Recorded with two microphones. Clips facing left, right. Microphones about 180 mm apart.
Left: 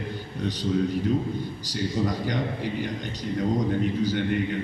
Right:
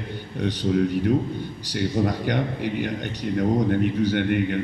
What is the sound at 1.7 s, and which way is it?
A man's voice, 65° right (ahead or behind).